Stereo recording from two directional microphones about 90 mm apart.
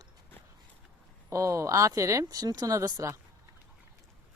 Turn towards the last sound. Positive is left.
turn(degrees=-40)  # may be behind; listen again after turning